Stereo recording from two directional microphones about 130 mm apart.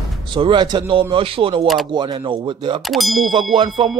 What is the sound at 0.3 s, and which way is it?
Speech, 40° right (ahead or behind).